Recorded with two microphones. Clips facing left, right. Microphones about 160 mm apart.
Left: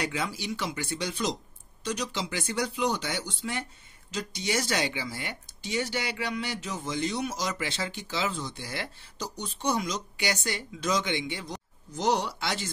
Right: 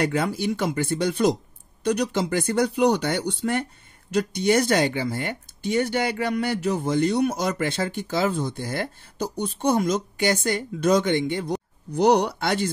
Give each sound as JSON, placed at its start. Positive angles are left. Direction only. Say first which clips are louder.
{"t": 0.0, "sound": "speech", "louder": "right 9 dB", "side_deg": -55}